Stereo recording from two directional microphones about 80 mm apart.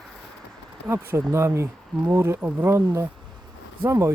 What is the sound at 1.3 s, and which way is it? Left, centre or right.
Speech, right.